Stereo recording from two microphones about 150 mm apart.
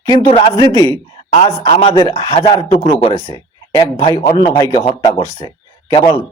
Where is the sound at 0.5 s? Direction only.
25° left (ahead or behind).